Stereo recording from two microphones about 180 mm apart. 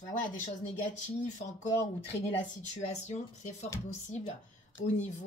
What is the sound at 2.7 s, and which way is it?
Speech, 40° left (ahead or behind).